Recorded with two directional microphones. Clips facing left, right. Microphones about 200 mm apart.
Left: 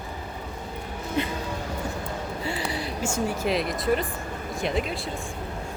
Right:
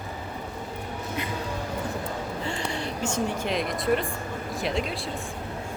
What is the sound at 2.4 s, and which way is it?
Speech, 5° left (ahead or behind).